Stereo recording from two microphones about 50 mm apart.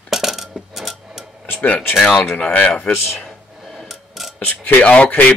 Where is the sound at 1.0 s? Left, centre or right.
Centre.